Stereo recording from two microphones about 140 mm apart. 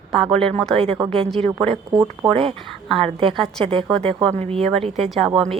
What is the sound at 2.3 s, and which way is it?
Speech, 45° right (ahead or behind).